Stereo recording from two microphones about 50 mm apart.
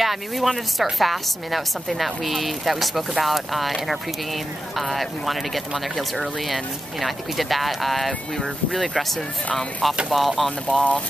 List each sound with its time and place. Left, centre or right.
0.0 s speech: centre
4.7 s speech: centre
10.1 s speech: centre
10.7 s speech: left